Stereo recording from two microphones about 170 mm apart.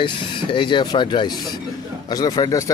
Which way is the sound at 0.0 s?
30° left (ahead or behind).